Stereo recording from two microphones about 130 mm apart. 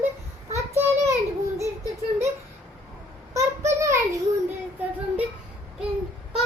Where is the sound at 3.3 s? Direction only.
25° right (ahead or behind).